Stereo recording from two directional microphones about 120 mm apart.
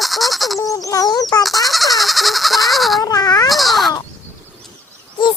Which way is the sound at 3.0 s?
30° left (ahead or behind).